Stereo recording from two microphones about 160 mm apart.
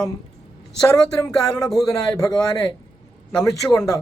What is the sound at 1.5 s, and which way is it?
Speech, 25° left (ahead or behind).